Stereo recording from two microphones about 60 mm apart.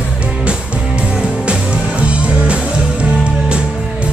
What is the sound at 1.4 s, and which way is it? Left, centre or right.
Music, centre.